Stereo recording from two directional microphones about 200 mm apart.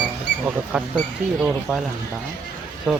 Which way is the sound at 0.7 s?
5° right (ahead or behind).